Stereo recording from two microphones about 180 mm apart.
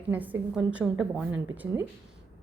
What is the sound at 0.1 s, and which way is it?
A woman's voice, 10° right (ahead or behind).